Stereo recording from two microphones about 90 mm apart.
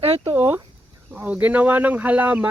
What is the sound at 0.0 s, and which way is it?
Speech, 90° right.